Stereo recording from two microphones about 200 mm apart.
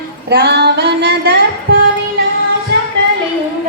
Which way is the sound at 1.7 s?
50° right (ahead or behind).